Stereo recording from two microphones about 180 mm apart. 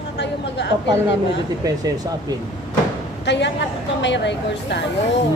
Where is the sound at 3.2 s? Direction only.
75° left (ahead or behind).